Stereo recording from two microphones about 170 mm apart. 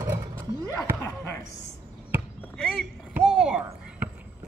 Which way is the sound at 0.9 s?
20° left (ahead or behind).